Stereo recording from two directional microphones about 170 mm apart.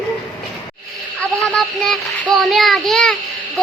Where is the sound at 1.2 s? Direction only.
Centre (ahead or behind).